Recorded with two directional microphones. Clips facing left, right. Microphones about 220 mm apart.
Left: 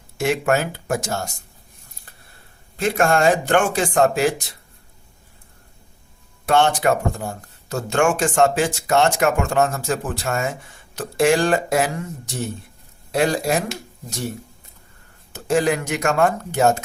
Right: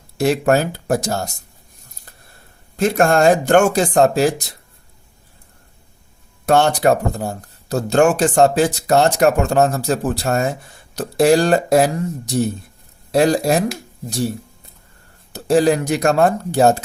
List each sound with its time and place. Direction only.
0.2 s speech: 35° right (ahead or behind)
2.7 s speech: 40° right (ahead or behind)
6.4 s speech: 40° right (ahead or behind)
15.3 s speech: 35° right (ahead or behind)